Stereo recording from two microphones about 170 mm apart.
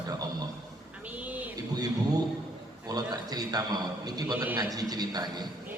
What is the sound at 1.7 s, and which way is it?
Speech, 25° right (ahead or behind).